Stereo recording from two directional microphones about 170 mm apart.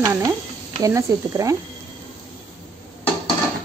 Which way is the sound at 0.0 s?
15° right (ahead or behind).